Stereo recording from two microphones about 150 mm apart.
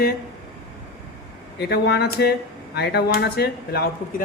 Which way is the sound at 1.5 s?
90° left.